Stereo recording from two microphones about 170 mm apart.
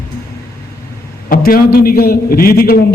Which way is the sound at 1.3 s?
60° left (ahead or behind).